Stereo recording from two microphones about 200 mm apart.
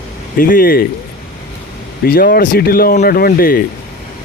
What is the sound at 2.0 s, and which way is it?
Speech, 50° left (ahead or behind).